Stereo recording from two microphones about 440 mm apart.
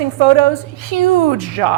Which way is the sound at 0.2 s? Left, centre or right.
Right.